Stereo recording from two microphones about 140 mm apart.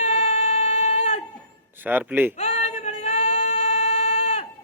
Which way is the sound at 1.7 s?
15° right (ahead or behind).